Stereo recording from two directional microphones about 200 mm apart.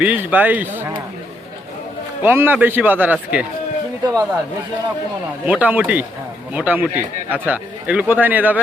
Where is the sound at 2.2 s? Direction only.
10° right (ahead or behind).